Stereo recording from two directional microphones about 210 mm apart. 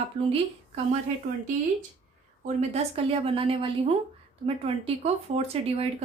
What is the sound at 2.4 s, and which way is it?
Speech, 30° right (ahead or behind).